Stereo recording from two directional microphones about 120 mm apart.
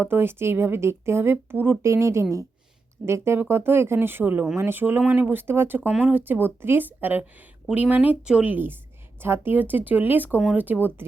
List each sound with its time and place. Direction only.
0.0 s speech: 20° right (ahead or behind)